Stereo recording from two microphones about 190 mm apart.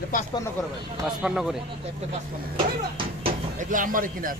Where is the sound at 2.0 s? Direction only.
35° right (ahead or behind).